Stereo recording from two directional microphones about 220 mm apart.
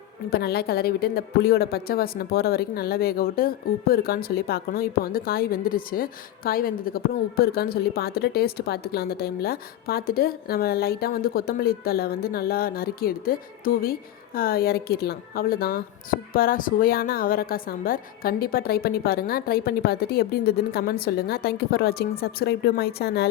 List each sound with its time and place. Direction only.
0.3 s speech: 45° left (ahead or behind)